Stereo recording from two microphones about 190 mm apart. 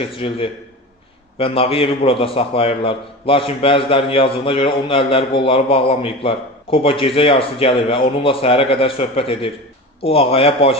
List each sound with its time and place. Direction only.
0.0 s a man's voice: 30° left (ahead or behind)